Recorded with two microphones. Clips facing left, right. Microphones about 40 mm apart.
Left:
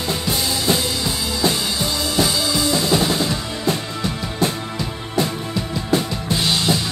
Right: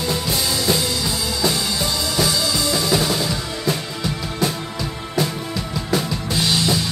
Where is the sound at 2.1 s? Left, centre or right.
Centre.